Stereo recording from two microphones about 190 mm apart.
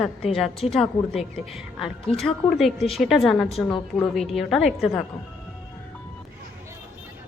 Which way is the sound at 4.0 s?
Centre (ahead or behind).